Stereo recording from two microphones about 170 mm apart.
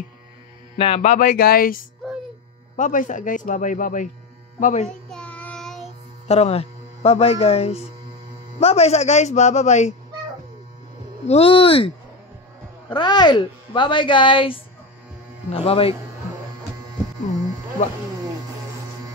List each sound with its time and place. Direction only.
0.7 s speech: 35° left (ahead or behind)
5.1 s child singing: 5° left (ahead or behind)
6.2 s a man's voice: 40° left (ahead or behind)
11.2 s speech: 35° left (ahead or behind)
12.9 s speech: 25° left (ahead or behind)